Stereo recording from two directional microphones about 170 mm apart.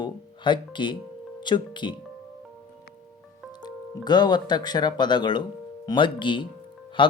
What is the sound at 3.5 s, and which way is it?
Speech, 25° left (ahead or behind).